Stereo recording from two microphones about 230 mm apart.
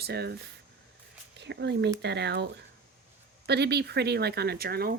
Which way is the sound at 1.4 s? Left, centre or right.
Right.